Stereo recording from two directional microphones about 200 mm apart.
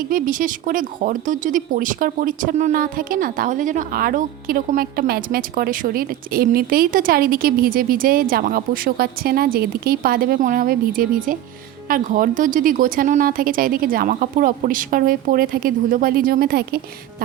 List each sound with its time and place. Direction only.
0.1 s speech: 40° right (ahead or behind)